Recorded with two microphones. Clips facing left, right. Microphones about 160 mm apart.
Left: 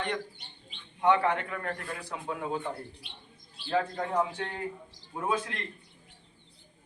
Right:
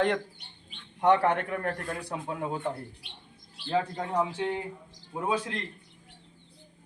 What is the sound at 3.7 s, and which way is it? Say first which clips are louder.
Speech: even; 15° right (ahead or behind).